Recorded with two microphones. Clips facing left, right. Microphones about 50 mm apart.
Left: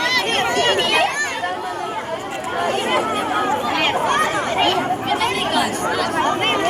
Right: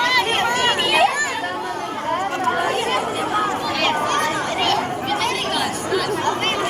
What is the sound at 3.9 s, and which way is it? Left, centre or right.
Chatter, centre.